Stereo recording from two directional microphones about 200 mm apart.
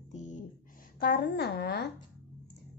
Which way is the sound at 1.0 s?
55° left (ahead or behind).